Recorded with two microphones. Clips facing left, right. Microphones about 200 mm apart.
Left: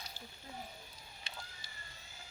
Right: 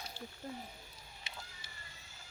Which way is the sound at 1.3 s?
20° right (ahead or behind).